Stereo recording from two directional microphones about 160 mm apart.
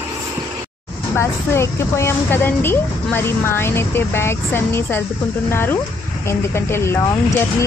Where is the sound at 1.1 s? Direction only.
15° left (ahead or behind).